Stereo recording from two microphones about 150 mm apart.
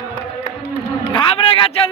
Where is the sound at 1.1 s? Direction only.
35° left (ahead or behind).